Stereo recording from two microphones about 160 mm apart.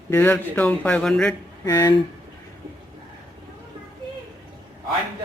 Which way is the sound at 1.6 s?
20° left (ahead or behind).